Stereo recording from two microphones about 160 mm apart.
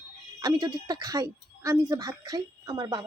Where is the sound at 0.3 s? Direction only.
25° right (ahead or behind).